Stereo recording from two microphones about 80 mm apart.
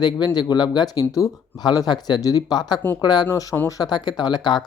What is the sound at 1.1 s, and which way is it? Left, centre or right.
Speech, left.